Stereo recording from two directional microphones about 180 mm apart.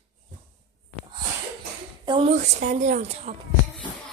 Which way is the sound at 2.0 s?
30° right (ahead or behind).